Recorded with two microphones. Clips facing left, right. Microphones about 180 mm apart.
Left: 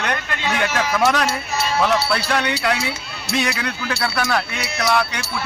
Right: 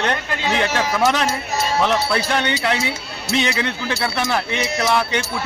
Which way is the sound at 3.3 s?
25° right (ahead or behind).